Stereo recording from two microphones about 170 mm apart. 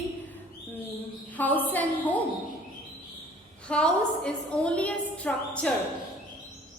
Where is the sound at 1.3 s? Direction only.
10° left (ahead or behind).